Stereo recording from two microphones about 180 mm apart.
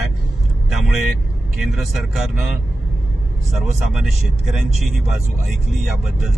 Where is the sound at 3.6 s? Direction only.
Centre (ahead or behind).